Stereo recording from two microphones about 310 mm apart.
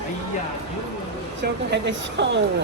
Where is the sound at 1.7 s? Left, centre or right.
Right.